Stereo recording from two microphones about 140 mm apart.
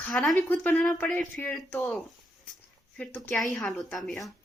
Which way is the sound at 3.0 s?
10° left (ahead or behind).